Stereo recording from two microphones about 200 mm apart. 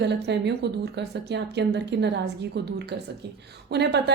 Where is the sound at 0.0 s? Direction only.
60° right (ahead or behind).